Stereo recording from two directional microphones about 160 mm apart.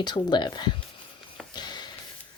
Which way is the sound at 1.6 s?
25° left (ahead or behind).